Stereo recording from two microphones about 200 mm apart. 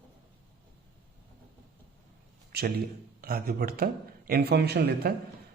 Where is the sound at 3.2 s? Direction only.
50° right (ahead or behind).